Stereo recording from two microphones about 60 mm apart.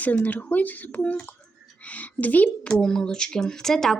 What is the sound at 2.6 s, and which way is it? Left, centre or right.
Speech, centre.